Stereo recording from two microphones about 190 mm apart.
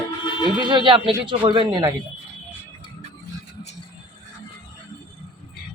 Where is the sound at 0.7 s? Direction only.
25° right (ahead or behind).